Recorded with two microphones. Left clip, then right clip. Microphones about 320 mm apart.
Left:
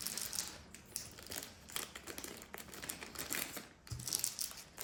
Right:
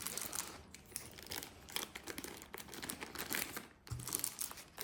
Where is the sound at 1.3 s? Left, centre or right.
Centre.